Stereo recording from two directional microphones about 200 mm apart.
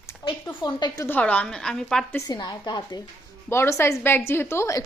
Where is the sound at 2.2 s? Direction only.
20° left (ahead or behind).